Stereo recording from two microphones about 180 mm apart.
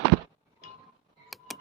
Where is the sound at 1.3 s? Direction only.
Centre (ahead or behind).